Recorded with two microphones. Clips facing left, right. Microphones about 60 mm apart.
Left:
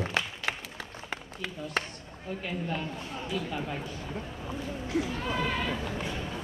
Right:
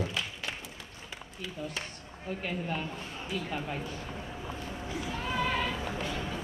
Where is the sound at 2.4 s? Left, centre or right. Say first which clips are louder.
Left 1 dB; centre.